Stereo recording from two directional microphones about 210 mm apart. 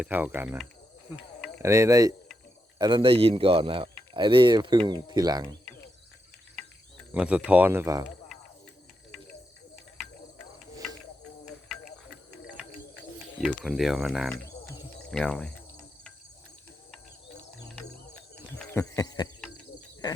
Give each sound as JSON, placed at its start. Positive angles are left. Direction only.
{"t": 0.0, "sound": "speech", "side_deg": -5}
{"t": 1.6, "sound": "speech", "side_deg": -15}
{"t": 7.1, "sound": "speech", "side_deg": -5}
{"t": 9.1, "sound": "cricket", "side_deg": 0}
{"t": 13.4, "sound": "speech", "side_deg": 0}
{"t": 17.7, "sound": "cricket", "side_deg": 5}
{"t": 18.6, "sound": "speech", "side_deg": 10}